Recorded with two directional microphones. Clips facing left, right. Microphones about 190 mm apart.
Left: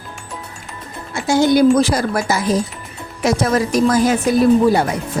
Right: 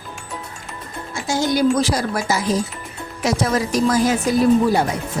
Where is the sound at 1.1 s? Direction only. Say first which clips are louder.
Left 6 dB; 60° left (ahead or behind).